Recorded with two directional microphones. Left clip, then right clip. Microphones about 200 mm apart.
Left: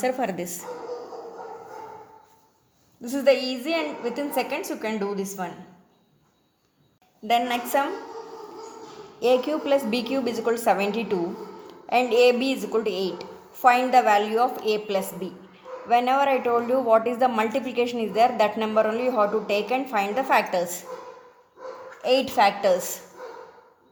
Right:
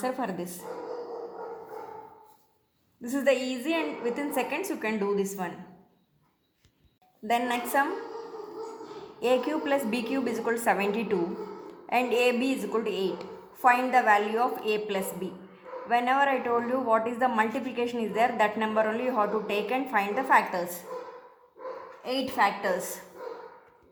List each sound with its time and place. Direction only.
0.0 s speech: 30° left (ahead or behind)
3.0 s a woman's voice: 15° left (ahead or behind)
7.3 s a woman's voice: 10° left (ahead or behind)
9.2 s a woman's voice: 20° left (ahead or behind)
22.0 s a woman's voice: 45° left (ahead or behind)